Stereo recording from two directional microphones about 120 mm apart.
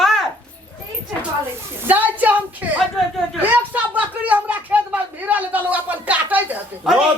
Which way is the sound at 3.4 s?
15° right (ahead or behind).